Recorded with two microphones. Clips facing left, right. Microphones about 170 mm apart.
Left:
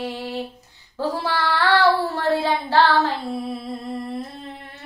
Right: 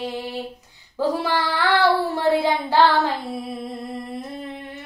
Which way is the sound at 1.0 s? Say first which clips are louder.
Right 2 dB; 15° right (ahead or behind).